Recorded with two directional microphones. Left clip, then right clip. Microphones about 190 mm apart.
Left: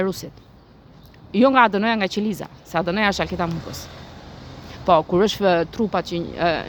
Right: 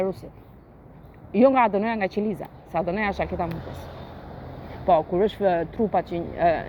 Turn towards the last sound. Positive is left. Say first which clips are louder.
# even
turn(degrees=30)  # may be behind; listen again after turning